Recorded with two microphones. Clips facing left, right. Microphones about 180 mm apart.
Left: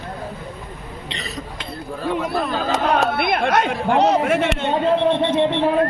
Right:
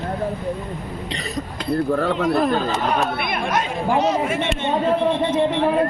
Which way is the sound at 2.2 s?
55° right (ahead or behind).